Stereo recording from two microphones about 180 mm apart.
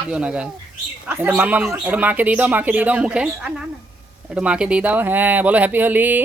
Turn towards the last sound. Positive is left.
turn(degrees=-10)  # may be behind; listen again after turning